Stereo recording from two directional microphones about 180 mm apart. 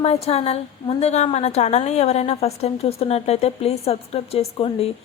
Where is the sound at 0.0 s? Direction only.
35° left (ahead or behind).